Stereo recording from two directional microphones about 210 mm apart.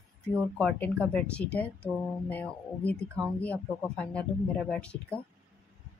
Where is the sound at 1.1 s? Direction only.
5° left (ahead or behind).